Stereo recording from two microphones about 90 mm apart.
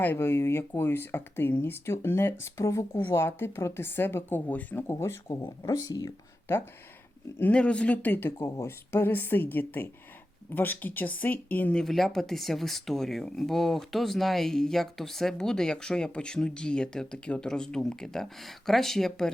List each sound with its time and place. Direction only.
0.0 s speech: 25° left (ahead or behind); by 6.1 s 40° left (ahead or behind)
7.3 s speech: 15° left (ahead or behind)
8.4 s speech: 40° left (ahead or behind)
8.9 s speech: 25° left (ahead or behind)
11.8 s speech: centre (ahead or behind)